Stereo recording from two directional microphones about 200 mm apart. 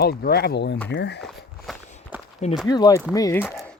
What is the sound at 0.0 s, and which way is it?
Speech, 50° left (ahead or behind).